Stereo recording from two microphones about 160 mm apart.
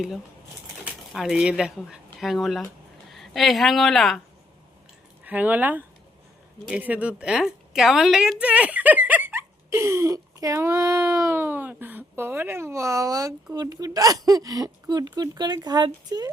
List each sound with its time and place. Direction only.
1.1 s speech: centre (ahead or behind)
5.2 s a woman's voice: 10° right (ahead or behind)